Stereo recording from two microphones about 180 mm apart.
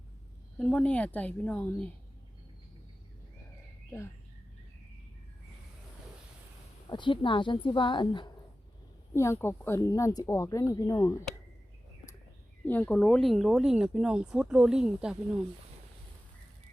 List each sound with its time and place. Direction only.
0.6 s speech: 5° left (ahead or behind)
6.8 s a woman's voice: 25° left (ahead or behind)
9.1 s speech: 15° left (ahead or behind)
12.6 s speech: 10° left (ahead or behind)